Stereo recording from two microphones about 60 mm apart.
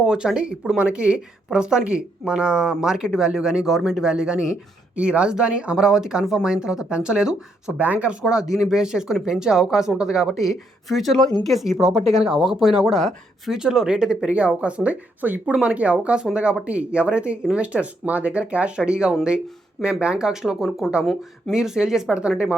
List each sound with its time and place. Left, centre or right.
0.0 s speech: centre
13.5 s speech: centre
14.3 s speech: right; by 21.5 s centre
21.5 s speech: centre